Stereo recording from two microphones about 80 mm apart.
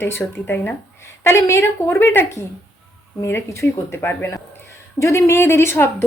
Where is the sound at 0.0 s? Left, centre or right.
Left.